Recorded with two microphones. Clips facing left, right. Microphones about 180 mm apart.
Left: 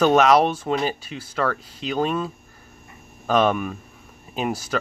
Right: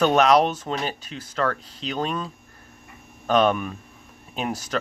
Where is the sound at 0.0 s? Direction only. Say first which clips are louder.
Left 2 dB; 5° left (ahead or behind).